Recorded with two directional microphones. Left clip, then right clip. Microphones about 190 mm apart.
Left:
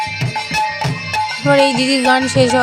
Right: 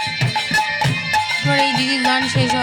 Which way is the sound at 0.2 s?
45° right (ahead or behind).